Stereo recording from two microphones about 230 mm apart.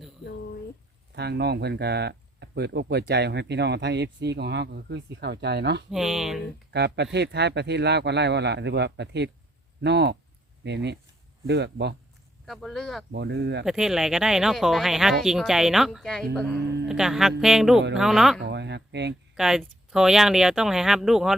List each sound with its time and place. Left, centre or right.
1.1 s speech: right
5.9 s speech: centre
6.7 s speech: right
12.5 s speech: centre
13.1 s speech: right
13.7 s speech: centre
16.6 s speech: right
16.9 s speech: centre
18.4 s a sound: right
19.4 s speech: centre